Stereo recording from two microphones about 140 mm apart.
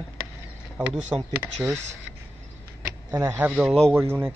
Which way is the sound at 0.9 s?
5° right (ahead or behind).